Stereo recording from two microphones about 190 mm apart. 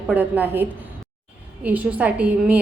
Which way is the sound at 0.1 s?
10° right (ahead or behind).